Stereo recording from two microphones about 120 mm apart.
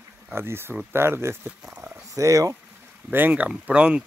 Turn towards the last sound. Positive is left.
turn(degrees=-10)  # may be behind; listen again after turning